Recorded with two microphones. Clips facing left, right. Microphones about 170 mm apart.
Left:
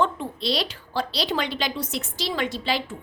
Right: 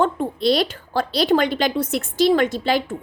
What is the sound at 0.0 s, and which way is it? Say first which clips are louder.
A woman's voice: right 6 dB; 50° right (ahead or behind).